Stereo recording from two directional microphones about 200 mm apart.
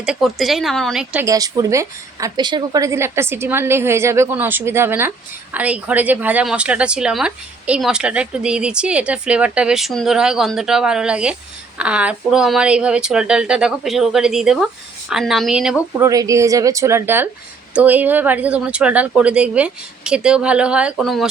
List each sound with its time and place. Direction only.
0.0 s speech: 5° right (ahead or behind)
1.2 s a woman's voice: 15° right (ahead or behind)
16.0 s a woman's voice: 15° right (ahead or behind); by 21.2 s centre (ahead or behind)